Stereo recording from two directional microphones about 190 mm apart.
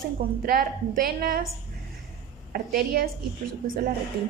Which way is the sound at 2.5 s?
50° right (ahead or behind).